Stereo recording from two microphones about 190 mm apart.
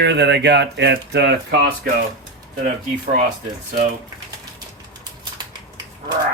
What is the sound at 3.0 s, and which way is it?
Speech, 45° right (ahead or behind).